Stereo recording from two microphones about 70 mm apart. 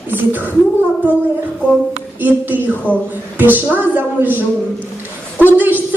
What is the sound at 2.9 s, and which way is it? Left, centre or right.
Speech, left.